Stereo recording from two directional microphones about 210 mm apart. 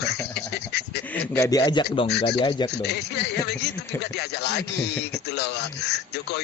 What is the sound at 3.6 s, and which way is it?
A man's voice, 50° left (ahead or behind).